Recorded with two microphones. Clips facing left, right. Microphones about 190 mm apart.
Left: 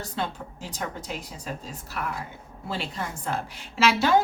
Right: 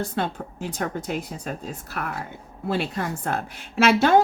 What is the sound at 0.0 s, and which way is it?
A woman's voice, 55° right (ahead or behind).